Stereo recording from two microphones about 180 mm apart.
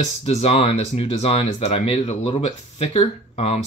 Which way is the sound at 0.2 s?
35° left (ahead or behind).